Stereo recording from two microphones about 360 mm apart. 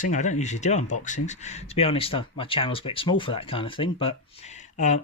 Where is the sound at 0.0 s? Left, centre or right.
Left.